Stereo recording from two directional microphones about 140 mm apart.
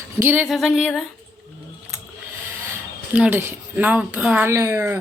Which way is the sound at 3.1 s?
10° right (ahead or behind).